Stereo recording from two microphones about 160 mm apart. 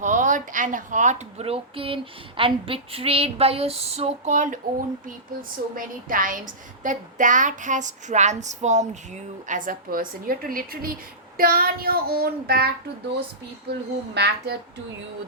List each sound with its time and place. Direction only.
0.0 s a woman's voice: 50° right (ahead or behind)
5.0 s a woman's voice: 60° right (ahead or behind)
11.3 s child singing: 65° right (ahead or behind)
13.7 s a child's voice: 85° right